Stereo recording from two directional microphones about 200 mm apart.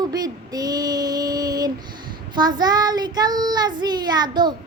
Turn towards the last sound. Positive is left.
turn(degrees=-20)  # may be behind; listen again after turning